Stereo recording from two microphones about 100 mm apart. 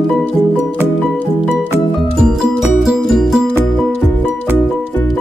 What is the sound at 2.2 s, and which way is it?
Music, 5° right (ahead or behind).